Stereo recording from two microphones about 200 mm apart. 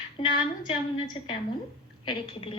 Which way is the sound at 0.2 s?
25° left (ahead or behind).